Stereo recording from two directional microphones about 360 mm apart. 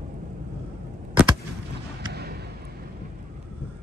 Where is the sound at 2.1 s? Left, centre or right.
Right.